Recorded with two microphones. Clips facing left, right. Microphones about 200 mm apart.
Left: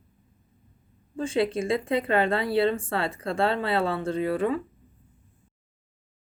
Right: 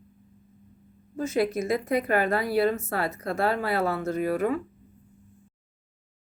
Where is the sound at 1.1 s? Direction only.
30° left (ahead or behind).